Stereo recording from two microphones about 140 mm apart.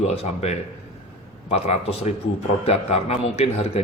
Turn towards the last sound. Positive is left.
turn(degrees=45)  # may be behind; listen again after turning